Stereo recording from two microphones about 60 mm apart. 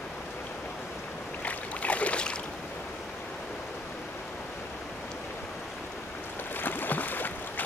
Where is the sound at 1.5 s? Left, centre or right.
Left.